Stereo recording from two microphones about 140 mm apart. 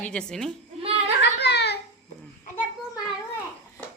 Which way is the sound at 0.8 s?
45° right (ahead or behind).